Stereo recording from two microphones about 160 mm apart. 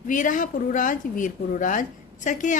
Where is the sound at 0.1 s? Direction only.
55° left (ahead or behind).